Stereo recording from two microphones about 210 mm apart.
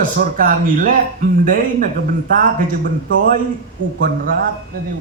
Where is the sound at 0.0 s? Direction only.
40° right (ahead or behind).